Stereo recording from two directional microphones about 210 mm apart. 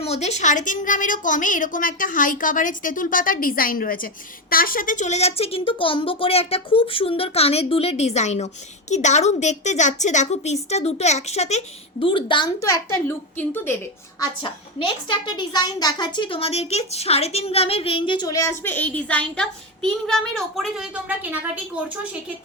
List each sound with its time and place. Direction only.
0.0 s a woman's voice: 30° left (ahead or behind); by 13.7 s 10° left (ahead or behind)
14.2 s a woman's voice: 25° left (ahead or behind); by 21.6 s 10° right (ahead or behind)